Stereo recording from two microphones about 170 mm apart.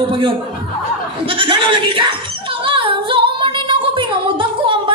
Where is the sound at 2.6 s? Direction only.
30° right (ahead or behind).